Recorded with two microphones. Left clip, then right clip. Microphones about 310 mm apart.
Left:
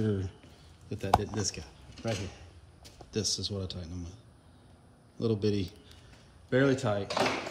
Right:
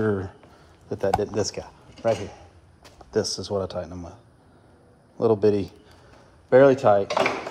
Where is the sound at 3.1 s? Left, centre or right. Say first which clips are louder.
Right 9 dB; centre.